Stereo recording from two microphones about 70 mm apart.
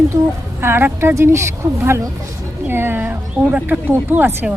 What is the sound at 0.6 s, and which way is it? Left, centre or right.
Speech, right.